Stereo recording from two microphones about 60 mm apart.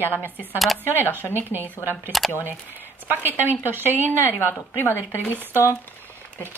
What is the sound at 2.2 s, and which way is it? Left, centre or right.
Speech, centre.